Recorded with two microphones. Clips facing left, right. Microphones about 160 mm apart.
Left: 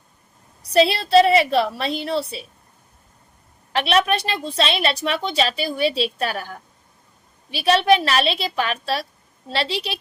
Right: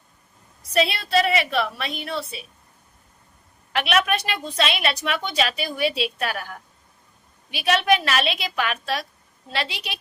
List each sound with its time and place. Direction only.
0.7 s a woman's voice: 30° left (ahead or behind)
3.7 s a woman's voice: 30° left (ahead or behind)